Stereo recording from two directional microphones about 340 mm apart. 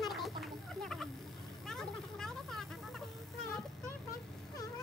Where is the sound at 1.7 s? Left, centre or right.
Centre.